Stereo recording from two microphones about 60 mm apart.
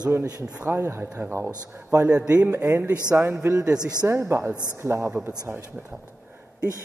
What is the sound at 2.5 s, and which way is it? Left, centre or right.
Speech, right.